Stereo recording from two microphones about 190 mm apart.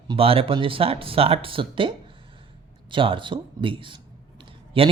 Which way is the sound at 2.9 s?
25° right (ahead or behind).